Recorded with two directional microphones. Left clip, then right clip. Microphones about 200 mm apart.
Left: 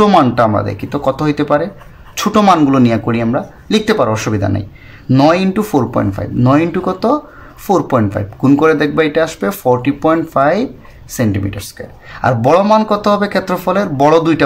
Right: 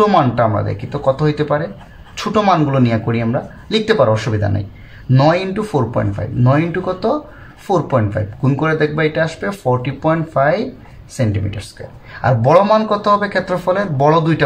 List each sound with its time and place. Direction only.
0.0 s speech: 50° left (ahead or behind)
12.2 s speech: 50° left (ahead or behind)